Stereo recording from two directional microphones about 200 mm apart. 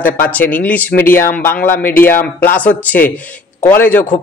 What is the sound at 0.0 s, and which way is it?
Speech, 10° left (ahead or behind).